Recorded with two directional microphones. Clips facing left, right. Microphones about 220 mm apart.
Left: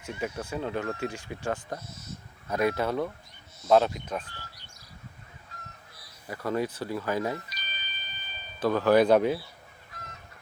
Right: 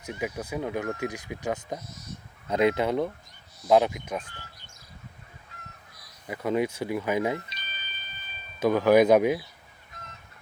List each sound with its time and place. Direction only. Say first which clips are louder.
0.0 s speech: right 1 dB; 15° right (ahead or behind)
5.5 s goose: left 1 dB; 40° left (ahead or behind)
6.2 s speech: right 3 dB; 15° right (ahead or behind)
8.6 s speech: right 2 dB; 10° right (ahead or behind)